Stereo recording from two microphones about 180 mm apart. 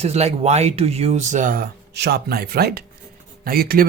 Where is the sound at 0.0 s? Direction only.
35° right (ahead or behind).